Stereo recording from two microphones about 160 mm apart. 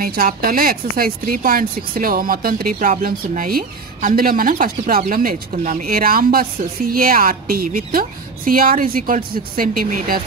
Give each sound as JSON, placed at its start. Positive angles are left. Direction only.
{"t": 0.0, "sound": "speech", "side_deg": -65}